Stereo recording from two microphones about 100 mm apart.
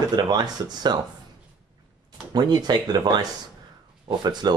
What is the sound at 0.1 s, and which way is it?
Speech, 45° right (ahead or behind).